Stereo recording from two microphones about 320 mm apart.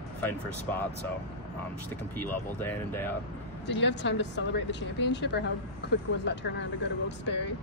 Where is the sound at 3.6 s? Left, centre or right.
Left.